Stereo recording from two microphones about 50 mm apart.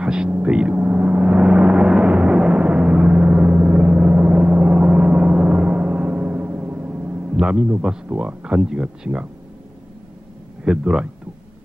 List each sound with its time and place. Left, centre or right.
0.0 s hum: centre
0.4 s gong: right
7.3 s a man's voice: right
10.6 s speech: right